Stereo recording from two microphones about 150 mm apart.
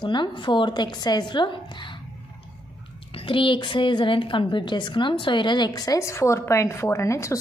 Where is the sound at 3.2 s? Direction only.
35° left (ahead or behind).